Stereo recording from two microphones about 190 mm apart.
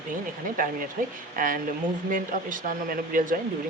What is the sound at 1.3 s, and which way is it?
Speech, 45° right (ahead or behind).